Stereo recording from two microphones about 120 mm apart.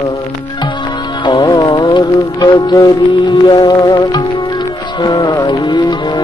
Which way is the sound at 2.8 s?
40° left (ahead or behind).